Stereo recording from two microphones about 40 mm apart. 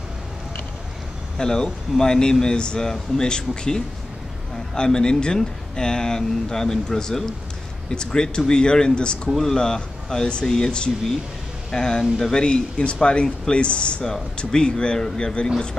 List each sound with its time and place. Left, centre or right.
1.4 s speech: centre
9.4 s speech: centre